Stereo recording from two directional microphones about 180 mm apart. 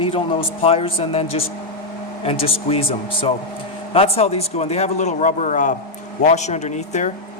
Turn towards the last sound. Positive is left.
turn(degrees=40)  # may be behind; listen again after turning